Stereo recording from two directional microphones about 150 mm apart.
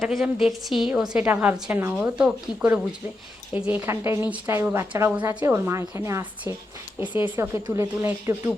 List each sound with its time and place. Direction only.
0.0 s a woman's voice: centre (ahead or behind); by 8.4 s 20° right (ahead or behind)